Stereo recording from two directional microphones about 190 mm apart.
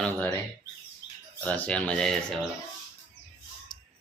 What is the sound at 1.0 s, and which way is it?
Bird, 20° left (ahead or behind).